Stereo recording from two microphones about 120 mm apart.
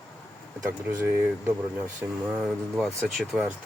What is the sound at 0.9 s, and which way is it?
Speech, 20° right (ahead or behind).